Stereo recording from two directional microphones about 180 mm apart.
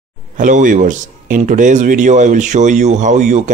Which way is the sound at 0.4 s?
45° right (ahead or behind).